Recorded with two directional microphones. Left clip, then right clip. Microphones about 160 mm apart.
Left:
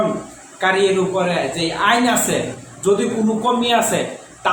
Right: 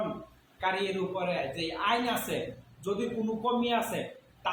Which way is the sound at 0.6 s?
5° left (ahead or behind).